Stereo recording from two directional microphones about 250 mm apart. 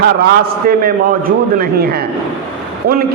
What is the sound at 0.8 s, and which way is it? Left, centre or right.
Speech, right.